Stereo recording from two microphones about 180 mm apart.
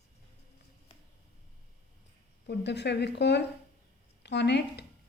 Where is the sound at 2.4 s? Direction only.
70° left (ahead or behind).